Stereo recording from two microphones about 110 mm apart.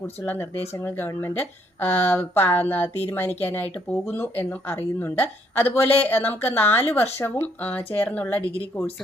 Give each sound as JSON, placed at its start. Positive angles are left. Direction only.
{"t": 0.2, "sound": "a woman's voice", "side_deg": 15}